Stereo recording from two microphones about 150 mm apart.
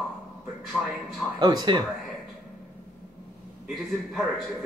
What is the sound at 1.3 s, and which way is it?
Speech, 30° right (ahead or behind).